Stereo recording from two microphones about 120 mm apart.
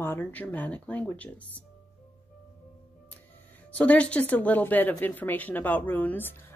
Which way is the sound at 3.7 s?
10° left (ahead or behind).